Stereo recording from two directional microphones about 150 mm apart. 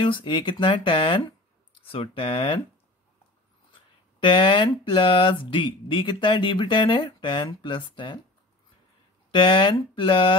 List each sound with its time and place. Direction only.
0.0 s speech: 30° left (ahead or behind)
4.2 s speech: 35° left (ahead or behind)
9.3 s speech: 35° left (ahead or behind)